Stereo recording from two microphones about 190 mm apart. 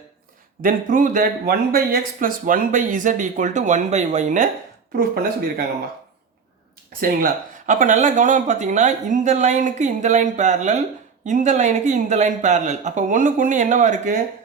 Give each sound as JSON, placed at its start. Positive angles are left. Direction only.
{"t": 0.6, "sound": "speech", "side_deg": -45}
{"t": 4.9, "sound": "speech", "side_deg": -50}
{"t": 7.0, "sound": "speech", "side_deg": -45}